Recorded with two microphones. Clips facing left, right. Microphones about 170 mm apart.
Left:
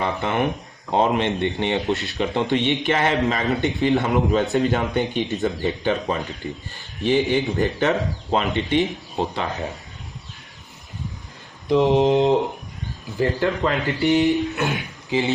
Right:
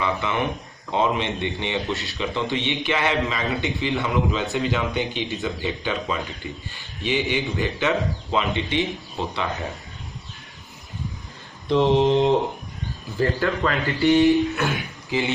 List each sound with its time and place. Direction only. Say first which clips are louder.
0.0 s speech: left 2 dB; 45° left (ahead or behind)
11.7 s mantra: left 1 dB; 15° left (ahead or behind)
13.1 s speech: left 1 dB; 20° left (ahead or behind)